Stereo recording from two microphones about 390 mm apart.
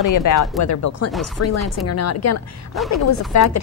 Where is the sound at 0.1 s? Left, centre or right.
Left.